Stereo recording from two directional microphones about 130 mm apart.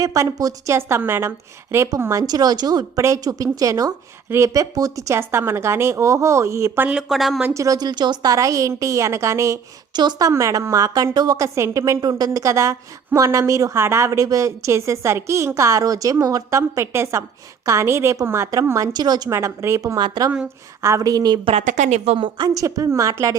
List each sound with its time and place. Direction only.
0.0 s a woman's voice: 25° right (ahead or behind); by 7.4 s centre (ahead or behind)
7.4 s a woman's voice: 25° right (ahead or behind)
19.3 s a woman's voice: 20° right (ahead or behind)
21.6 s a woman's voice: 75° right (ahead or behind); by 22.2 s 60° right (ahead or behind)
22.2 s a woman's voice: 35° right (ahead or behind)